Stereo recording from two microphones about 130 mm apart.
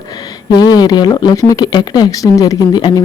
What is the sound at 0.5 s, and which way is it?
Speech, 30° left (ahead or behind).